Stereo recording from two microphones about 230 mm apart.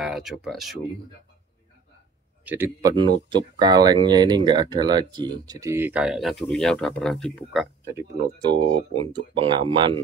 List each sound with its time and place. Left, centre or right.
0.0 s speech: centre
2.4 s speech: centre
7.8 s speech: centre